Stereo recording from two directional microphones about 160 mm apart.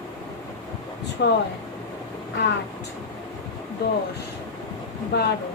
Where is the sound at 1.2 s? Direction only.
90° left.